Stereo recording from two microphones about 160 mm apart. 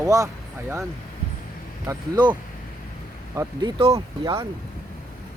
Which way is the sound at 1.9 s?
25° right (ahead or behind).